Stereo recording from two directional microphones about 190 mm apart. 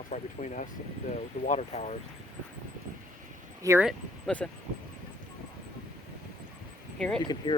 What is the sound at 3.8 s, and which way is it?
Speech, 5° left (ahead or behind).